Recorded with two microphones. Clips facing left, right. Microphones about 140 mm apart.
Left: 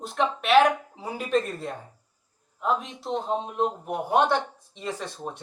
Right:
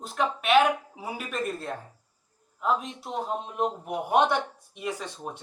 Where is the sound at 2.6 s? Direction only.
Centre (ahead or behind).